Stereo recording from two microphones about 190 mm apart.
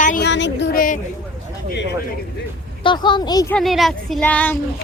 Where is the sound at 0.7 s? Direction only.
45° left (ahead or behind).